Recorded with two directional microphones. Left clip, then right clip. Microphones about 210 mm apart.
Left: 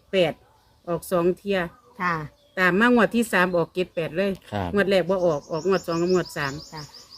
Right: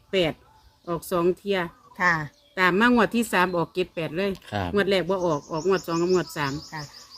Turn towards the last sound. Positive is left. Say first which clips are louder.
# even
turn(degrees=0)  # may be behind; listen again after turning